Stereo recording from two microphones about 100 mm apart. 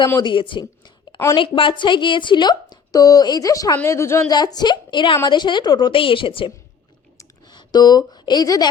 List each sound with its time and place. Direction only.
0.2 s a woman's voice: 55° left (ahead or behind); by 4.2 s 30° left (ahead or behind)
4.3 s speech: 40° left (ahead or behind); by 6.5 s 60° left (ahead or behind)
7.4 s speech: 45° left (ahead or behind)